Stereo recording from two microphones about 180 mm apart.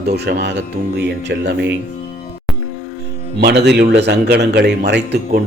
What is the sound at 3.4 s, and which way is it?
Speech, 65° right (ahead or behind).